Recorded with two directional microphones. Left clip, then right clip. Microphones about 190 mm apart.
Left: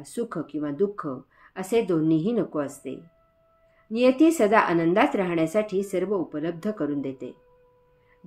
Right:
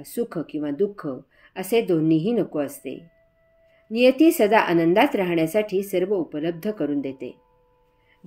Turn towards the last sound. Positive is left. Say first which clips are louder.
# right 3 dB
turn(degrees=-40)  # may be behind; listen again after turning